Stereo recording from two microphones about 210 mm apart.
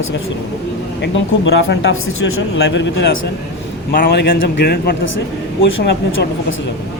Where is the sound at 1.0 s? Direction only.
55° left (ahead or behind).